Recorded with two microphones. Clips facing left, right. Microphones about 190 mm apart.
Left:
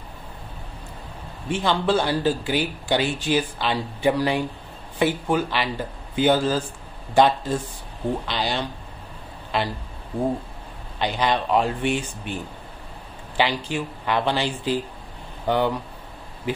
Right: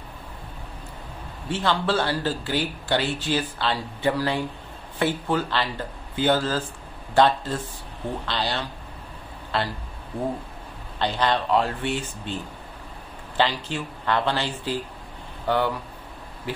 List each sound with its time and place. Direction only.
1.5 s speech: 15° left (ahead or behind)
11.0 s speech: 15° left (ahead or behind)
13.4 s speech: 15° left (ahead or behind)